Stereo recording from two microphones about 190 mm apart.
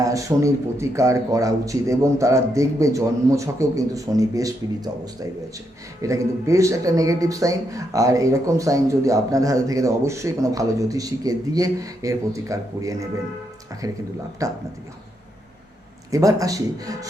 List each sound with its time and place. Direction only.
0.0 s speech: 15° right (ahead or behind)
16.1 s speech: 15° right (ahead or behind)